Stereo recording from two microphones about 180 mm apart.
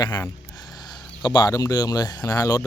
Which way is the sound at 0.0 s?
20° left (ahead or behind).